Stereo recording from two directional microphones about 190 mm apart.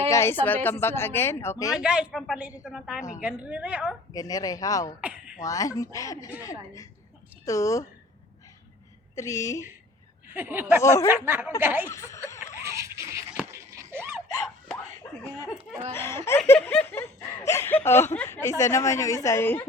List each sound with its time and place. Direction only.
0.1 s speech: 15° left (ahead or behind)
1.8 s a woman's voice: 5° right (ahead or behind)
4.1 s speech: 20° left (ahead or behind)
4.9 s a woman's voice: 5° right (ahead or behind)
5.5 s speech: 20° left (ahead or behind)
9.1 s speech: 15° left (ahead or behind)
10.3 s a woman's voice: 10° right (ahead or behind)
11.9 s speech: 15° left (ahead or behind)
12.6 s a sound: 15° right (ahead or behind)
16.0 s speech: 15° left (ahead or behind)